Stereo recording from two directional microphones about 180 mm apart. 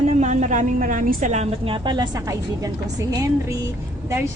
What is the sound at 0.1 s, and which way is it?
A woman's voice, 40° right (ahead or behind).